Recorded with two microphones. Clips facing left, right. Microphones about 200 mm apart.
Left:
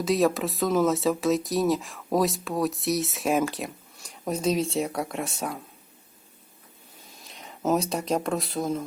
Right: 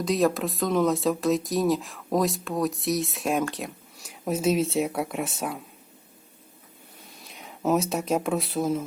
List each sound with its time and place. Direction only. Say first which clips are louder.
0.0 s speech: even; centre (ahead or behind)
7.3 s speech: right 1 dB; centre (ahead or behind)